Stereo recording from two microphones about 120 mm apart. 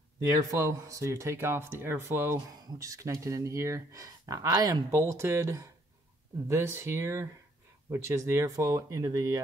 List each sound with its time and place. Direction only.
0.3 s speech: 30° right (ahead or behind)